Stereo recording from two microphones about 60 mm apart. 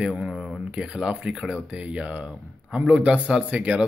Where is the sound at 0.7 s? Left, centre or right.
Centre.